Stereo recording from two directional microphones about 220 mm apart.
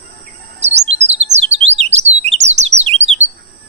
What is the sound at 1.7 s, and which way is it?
Bird, 30° right (ahead or behind).